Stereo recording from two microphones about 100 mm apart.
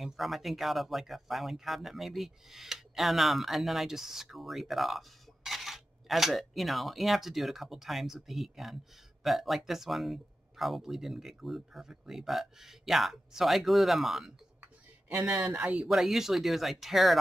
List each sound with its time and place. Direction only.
0.0 s speech: centre (ahead or behind)
14.6 s a sound: 20° right (ahead or behind)
15.4 s speech: 15° right (ahead or behind)
15.9 s speech: 5° right (ahead or behind)